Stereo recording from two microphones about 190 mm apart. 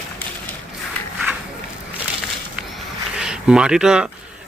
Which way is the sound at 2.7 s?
5° right (ahead or behind).